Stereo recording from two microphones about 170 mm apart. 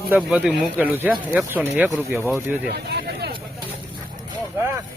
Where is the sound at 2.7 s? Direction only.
75° right (ahead or behind).